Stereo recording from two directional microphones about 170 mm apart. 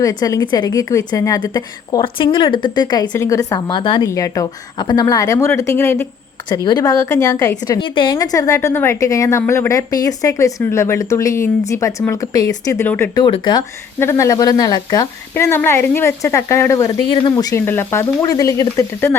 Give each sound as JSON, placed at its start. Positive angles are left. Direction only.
{"t": 0.0, "sound": "a woman's voice", "side_deg": 20}
{"t": 13.2, "sound": "a woman's voice", "side_deg": 30}